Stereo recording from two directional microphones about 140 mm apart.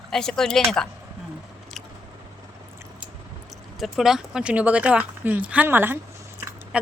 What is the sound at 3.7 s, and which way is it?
Speech, centre (ahead or behind).